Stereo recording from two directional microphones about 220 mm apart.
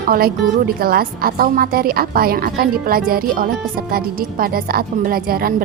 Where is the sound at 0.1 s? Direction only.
40° right (ahead or behind).